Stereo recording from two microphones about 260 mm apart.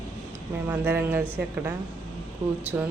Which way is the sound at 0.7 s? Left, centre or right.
Centre.